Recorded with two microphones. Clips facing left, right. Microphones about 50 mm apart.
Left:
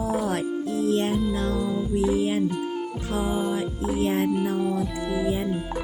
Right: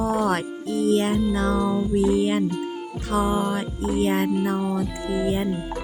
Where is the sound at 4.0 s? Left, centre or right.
Right.